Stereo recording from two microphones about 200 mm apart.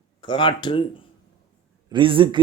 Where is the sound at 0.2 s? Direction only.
25° left (ahead or behind).